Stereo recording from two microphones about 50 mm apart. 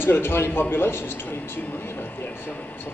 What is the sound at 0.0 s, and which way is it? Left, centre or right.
A man's voice, left.